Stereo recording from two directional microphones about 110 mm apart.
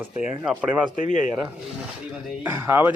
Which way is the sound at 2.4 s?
20° right (ahead or behind).